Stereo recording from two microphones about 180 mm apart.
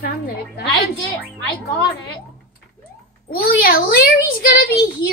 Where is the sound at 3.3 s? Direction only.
55° left (ahead or behind).